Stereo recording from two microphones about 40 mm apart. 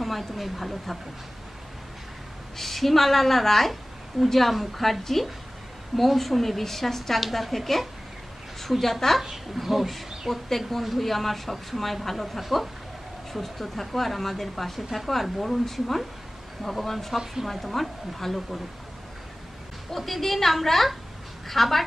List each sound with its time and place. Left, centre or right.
0.0 s a woman's voice: centre
2.5 s a woman's voice: centre
20.0 s a woman's voice: centre